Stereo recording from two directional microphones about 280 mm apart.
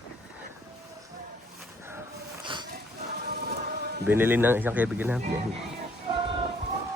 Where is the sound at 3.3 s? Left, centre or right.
Right.